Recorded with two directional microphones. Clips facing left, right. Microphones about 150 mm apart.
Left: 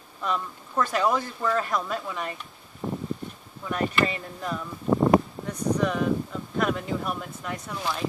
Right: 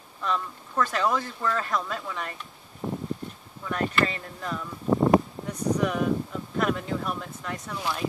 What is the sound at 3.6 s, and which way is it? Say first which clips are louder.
Speech: left 1 dB; 10° left (ahead or behind).